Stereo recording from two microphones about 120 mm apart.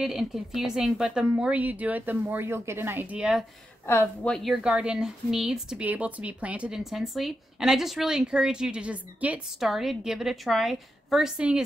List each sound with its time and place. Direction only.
0.0 s a woman's voice: 5° right (ahead or behind); by 3.2 s 20° right (ahead or behind)
3.2 s a woman's voice: 5° right (ahead or behind)
3.8 s a woman's voice: 20° left (ahead or behind)
4.3 s a woman's voice: centre (ahead or behind)